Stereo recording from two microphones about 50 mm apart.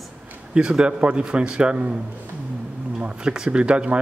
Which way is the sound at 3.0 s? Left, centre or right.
Right.